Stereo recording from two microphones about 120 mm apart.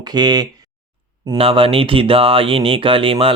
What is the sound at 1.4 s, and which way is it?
Speech, 50° right (ahead or behind).